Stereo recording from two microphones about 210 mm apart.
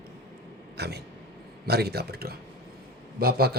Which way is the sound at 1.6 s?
50° right (ahead or behind).